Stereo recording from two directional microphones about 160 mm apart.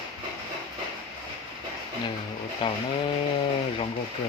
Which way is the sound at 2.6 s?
30° left (ahead or behind).